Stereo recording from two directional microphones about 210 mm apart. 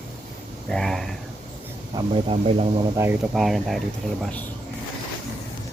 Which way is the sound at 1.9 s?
30° right (ahead or behind).